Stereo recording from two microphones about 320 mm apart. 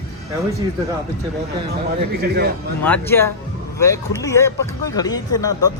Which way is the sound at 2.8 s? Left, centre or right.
Centre.